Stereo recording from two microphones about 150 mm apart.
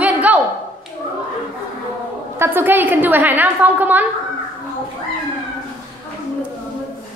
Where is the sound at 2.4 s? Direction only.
15° right (ahead or behind).